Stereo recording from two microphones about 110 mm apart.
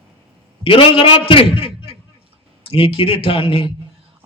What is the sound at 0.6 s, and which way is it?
A man's voice, 55° left (ahead or behind).